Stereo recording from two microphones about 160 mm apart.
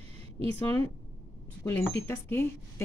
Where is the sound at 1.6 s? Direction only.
15° left (ahead or behind).